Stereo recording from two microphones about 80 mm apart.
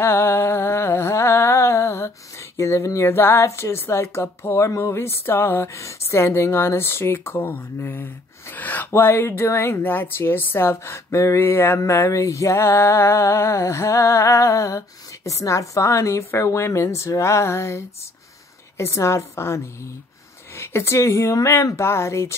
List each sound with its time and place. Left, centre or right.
0.0 s music: left
8.5 s a woman's voice: left